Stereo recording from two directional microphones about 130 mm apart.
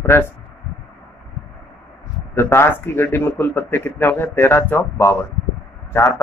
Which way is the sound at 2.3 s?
20° left (ahead or behind).